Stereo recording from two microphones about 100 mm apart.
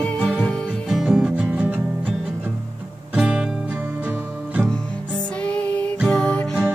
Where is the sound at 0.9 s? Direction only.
5° right (ahead or behind).